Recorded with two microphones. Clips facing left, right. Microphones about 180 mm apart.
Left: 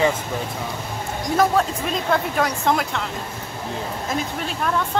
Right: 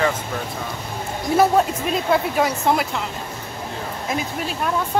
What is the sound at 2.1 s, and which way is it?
Speech, 5° right (ahead or behind).